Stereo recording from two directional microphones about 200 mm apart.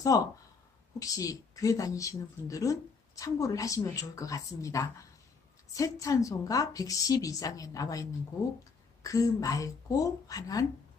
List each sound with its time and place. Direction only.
0.1 s a woman's voice: 15° left (ahead or behind)
9.0 s a woman's voice: 15° left (ahead or behind)